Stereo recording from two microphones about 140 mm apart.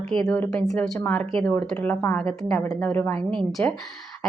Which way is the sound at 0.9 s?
15° left (ahead or behind).